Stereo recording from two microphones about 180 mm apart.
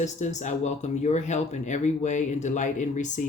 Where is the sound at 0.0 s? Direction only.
40° left (ahead or behind).